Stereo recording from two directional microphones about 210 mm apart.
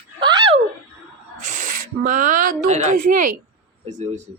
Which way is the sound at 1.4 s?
35° right (ahead or behind).